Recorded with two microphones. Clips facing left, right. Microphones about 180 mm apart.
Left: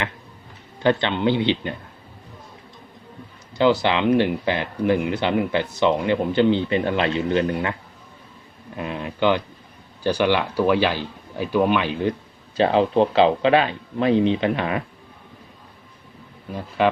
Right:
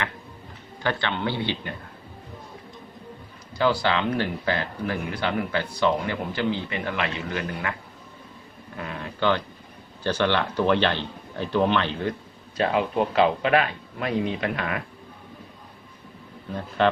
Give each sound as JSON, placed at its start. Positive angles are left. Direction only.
{"t": 0.8, "sound": "speech", "side_deg": 20}
{"t": 3.6, "sound": "speech", "side_deg": 20}
{"t": 8.8, "sound": "speech", "side_deg": 20}
{"t": 12.5, "sound": "speech", "side_deg": 30}
{"t": 16.5, "sound": "speech", "side_deg": 10}